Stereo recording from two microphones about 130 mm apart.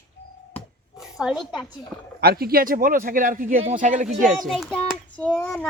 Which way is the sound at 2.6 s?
90° right.